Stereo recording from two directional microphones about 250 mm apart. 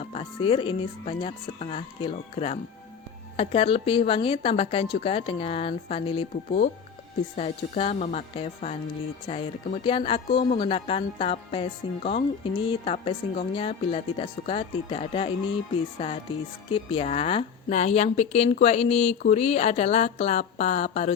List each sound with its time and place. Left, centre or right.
0.0 s a woman's voice: left